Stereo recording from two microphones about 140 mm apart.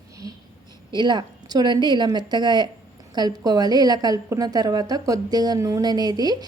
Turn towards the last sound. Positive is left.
turn(degrees=-30)  # may be behind; listen again after turning